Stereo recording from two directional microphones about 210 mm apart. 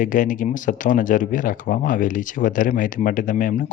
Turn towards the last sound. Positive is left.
turn(degrees=40)  # may be behind; listen again after turning